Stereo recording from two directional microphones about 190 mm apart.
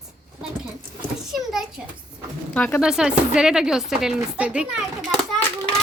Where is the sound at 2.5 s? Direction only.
10° left (ahead or behind).